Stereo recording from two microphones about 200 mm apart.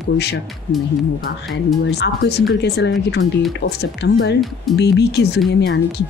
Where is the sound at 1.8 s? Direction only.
55° left (ahead or behind).